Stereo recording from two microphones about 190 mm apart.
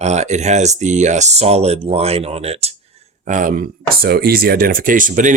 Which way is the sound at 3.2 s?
45° right (ahead or behind).